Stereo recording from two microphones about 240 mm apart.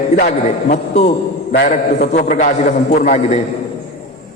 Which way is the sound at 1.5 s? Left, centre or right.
Left.